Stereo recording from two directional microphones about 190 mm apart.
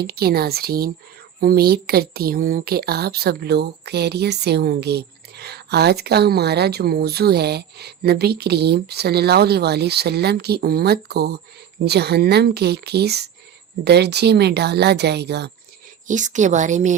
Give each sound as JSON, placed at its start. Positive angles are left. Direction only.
{"t": 0.0, "sound": "speech", "side_deg": -55}
{"t": 16.0, "sound": "a woman's voice", "side_deg": -40}